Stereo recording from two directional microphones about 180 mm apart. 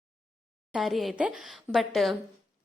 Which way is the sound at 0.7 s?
Centre (ahead or behind).